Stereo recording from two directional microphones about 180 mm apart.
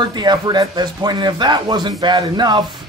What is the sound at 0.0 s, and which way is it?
Speech, 25° right (ahead or behind).